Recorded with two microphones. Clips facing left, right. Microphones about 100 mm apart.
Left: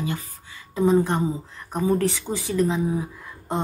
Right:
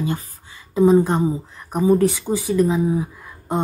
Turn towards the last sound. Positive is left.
turn(degrees=-10)  # may be behind; listen again after turning